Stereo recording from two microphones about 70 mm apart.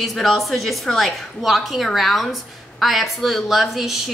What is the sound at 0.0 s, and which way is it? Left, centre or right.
A woman's voice, centre.